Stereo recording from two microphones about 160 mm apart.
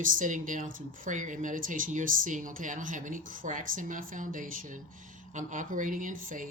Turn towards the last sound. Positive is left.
turn(degrees=-55)  # may be behind; listen again after turning